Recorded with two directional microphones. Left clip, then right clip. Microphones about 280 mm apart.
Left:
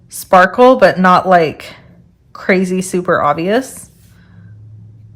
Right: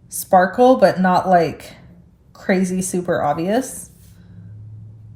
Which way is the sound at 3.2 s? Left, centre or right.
Centre.